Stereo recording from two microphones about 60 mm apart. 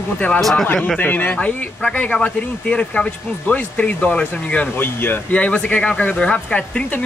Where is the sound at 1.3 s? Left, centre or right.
Centre.